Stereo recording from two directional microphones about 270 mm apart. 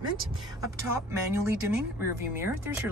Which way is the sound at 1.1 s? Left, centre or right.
Centre.